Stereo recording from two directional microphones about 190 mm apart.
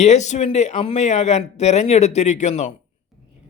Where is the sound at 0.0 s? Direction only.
35° left (ahead or behind).